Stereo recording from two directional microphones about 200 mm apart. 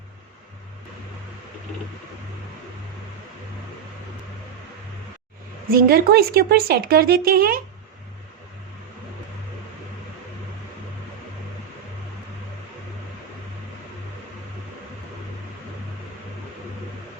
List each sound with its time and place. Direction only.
5.7 s speech: 50° right (ahead or behind)